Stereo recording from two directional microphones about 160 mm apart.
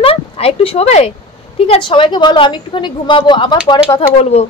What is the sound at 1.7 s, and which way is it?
A woman's voice, 30° left (ahead or behind).